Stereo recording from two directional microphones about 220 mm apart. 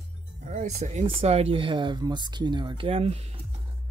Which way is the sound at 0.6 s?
30° right (ahead or behind).